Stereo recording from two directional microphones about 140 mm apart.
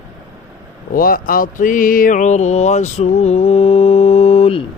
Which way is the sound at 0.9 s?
90° left.